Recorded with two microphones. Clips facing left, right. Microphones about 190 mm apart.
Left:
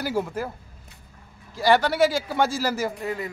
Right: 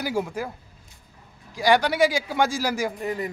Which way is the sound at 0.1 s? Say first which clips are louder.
Even; 5° left (ahead or behind).